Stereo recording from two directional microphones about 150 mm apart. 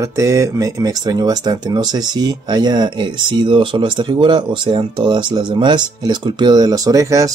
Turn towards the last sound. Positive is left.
turn(degrees=-20)  # may be behind; listen again after turning